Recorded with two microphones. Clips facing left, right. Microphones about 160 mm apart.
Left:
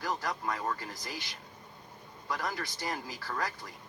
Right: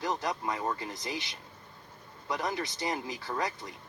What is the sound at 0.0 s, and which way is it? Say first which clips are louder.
Speech: right 2 dB; 20° right (ahead or behind).